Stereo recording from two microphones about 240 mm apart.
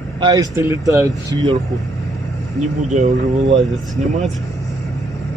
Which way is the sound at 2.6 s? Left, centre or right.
Right.